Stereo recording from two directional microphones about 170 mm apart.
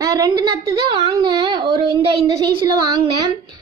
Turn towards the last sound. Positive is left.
turn(degrees=-25)  # may be behind; listen again after turning